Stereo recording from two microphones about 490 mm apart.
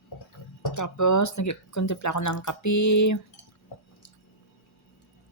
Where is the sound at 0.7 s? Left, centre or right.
Left.